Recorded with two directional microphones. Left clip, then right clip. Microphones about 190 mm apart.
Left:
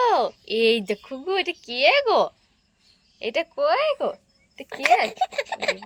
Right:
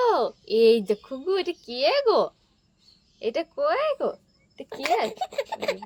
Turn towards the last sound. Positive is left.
turn(degrees=-15)  # may be behind; listen again after turning